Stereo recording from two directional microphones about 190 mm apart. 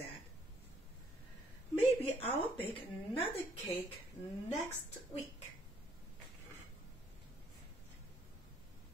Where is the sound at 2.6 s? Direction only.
10° left (ahead or behind).